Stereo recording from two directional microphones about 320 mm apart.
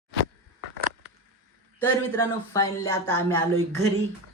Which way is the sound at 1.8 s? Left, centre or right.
Centre.